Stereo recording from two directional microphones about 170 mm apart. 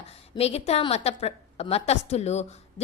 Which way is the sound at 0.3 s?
35° left (ahead or behind).